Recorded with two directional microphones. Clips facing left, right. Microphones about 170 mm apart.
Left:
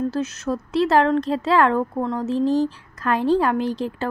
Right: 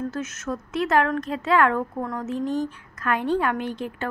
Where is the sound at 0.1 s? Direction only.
35° left (ahead or behind).